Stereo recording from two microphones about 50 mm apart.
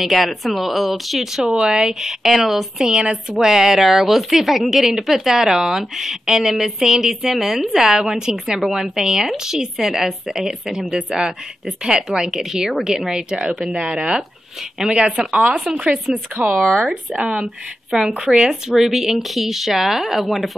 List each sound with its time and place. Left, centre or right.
0.0 s speech: centre
2.9 s a woman's voice: centre
15.5 s speech: centre
16.1 s speech: right
16.6 s speech: centre
18.2 s speech: centre